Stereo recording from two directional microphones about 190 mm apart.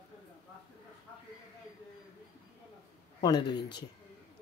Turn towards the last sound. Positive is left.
turn(degrees=60)  # may be behind; listen again after turning